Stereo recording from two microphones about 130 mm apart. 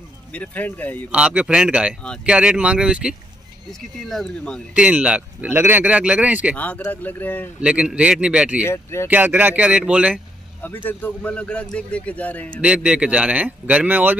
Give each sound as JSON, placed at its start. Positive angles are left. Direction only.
{"t": 0.3, "sound": "a man's voice", "side_deg": 10}
{"t": 1.1, "sound": "speech", "side_deg": -10}
{"t": 4.7, "sound": "speech", "side_deg": -10}
{"t": 6.5, "sound": "a man's voice", "side_deg": 10}
{"t": 7.6, "sound": "speech", "side_deg": -10}
{"t": 8.6, "sound": "speech", "side_deg": 20}
{"t": 9.0, "sound": "speech", "side_deg": -15}
{"t": 10.6, "sound": "a man's voice", "side_deg": 15}
{"t": 12.5, "sound": "speech", "side_deg": -10}